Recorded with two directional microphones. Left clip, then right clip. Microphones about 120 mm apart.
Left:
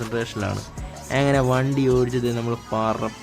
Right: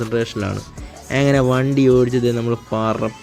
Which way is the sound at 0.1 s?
30° right (ahead or behind).